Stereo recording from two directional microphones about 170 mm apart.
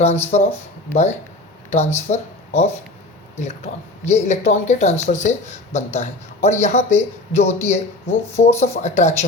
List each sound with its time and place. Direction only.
0.0 s speech: 40° left (ahead or behind)